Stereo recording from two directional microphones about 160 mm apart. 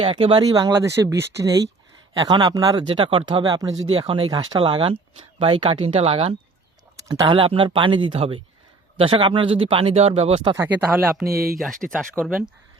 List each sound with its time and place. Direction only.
0.0 s speech: 30° right (ahead or behind)
2.9 s speech: 35° right (ahead or behind)
3.9 s speech: 35° right (ahead or behind)
10.4 s speech: 25° right (ahead or behind)
11.3 s speech: 70° right (ahead or behind)
11.6 s speech: centre (ahead or behind)